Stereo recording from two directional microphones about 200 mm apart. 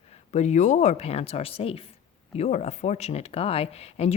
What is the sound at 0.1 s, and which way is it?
A woman's voice, 35° left (ahead or behind).